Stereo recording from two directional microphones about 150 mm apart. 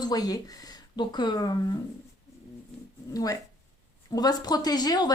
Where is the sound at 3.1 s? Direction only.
25° left (ahead or behind).